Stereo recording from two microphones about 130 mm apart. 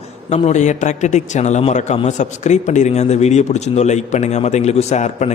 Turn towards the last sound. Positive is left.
turn(degrees=60)  # may be behind; listen again after turning